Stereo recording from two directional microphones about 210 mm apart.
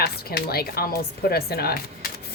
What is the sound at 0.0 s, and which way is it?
Speech, 50° left (ahead or behind).